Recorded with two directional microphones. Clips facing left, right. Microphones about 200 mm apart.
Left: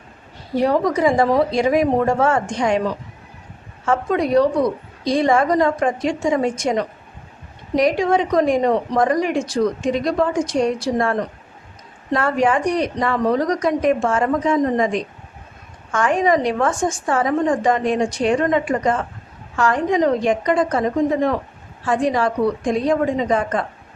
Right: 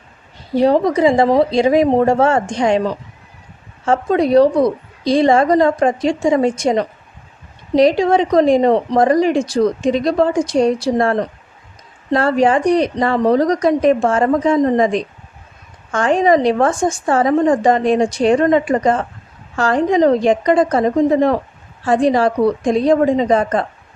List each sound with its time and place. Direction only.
0.5 s a woman's voice: 30° right (ahead or behind)